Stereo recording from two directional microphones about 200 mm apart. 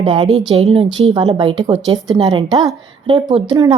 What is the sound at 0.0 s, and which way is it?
A woman's voice, 25° right (ahead or behind).